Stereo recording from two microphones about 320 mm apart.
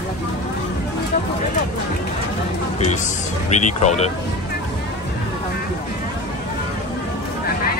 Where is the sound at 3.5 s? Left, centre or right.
Left.